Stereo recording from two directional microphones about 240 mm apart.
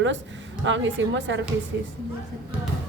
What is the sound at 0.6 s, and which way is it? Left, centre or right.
A woman's voice, right.